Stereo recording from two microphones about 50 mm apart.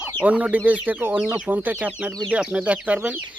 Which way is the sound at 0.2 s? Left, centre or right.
Right.